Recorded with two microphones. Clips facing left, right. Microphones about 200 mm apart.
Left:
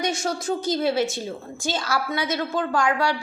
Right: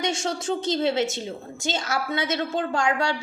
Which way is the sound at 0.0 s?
25° right (ahead or behind).